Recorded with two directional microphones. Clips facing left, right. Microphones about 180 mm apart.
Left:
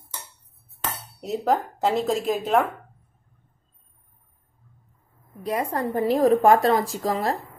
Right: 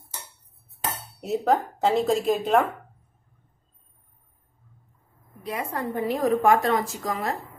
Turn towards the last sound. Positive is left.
turn(degrees=35)  # may be behind; listen again after turning